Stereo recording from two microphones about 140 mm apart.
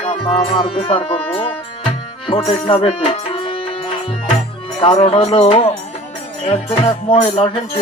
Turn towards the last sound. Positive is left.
turn(degrees=40)  # may be behind; listen again after turning